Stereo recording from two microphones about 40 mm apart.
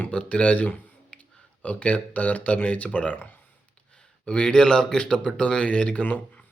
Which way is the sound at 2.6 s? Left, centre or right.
Left.